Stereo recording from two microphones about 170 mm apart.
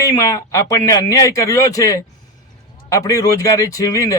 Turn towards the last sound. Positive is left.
turn(degrees=20)  # may be behind; listen again after turning